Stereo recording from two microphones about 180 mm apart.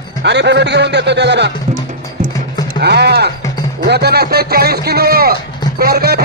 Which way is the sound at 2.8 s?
65° right (ahead or behind).